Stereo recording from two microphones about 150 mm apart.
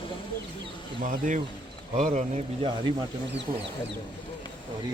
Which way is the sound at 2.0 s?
50° right (ahead or behind).